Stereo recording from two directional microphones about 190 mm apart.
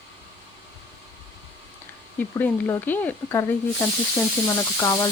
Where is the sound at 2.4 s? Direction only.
10° left (ahead or behind).